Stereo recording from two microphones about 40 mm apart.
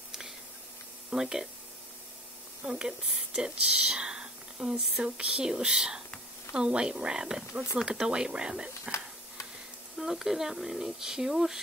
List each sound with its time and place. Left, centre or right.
1.1 s speech: centre
2.6 s speech: centre
3.3 s whispering: right
4.9 s speech: right
9.9 s speech: centre